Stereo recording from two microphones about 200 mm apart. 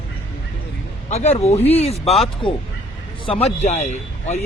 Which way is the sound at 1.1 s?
35° left (ahead or behind).